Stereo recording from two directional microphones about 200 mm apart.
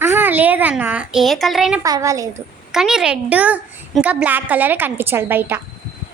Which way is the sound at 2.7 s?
5° right (ahead or behind).